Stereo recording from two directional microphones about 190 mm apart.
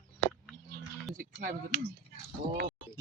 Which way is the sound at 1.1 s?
50° right (ahead or behind).